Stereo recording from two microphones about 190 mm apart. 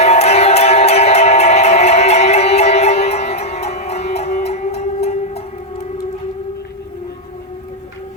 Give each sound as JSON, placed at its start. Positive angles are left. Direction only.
{"t": 0.0, "sound": "music", "side_deg": 35}